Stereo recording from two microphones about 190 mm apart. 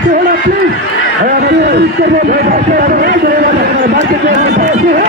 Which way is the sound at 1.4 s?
65° right (ahead or behind).